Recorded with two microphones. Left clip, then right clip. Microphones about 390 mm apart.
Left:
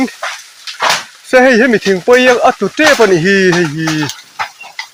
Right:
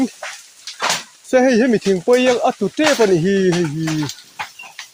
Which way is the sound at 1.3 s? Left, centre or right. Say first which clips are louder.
Left 7 dB; right.